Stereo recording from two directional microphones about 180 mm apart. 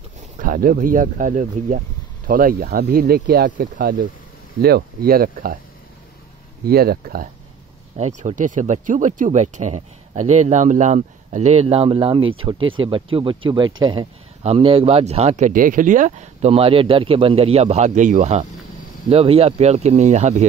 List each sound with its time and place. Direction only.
0.4 s speech: 50° right (ahead or behind)
4.6 s speech: 60° right (ahead or behind)
6.6 s speech: 60° right (ahead or behind)
8.0 s speech: 45° right (ahead or behind)